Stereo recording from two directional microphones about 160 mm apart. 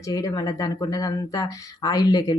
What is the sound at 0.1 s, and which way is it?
Speech, 20° left (ahead or behind).